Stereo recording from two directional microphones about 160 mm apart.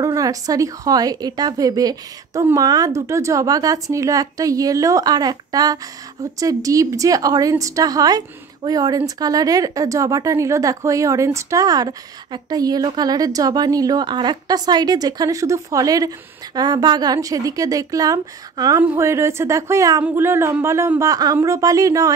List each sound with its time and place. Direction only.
0.0 s speech: 20° right (ahead or behind)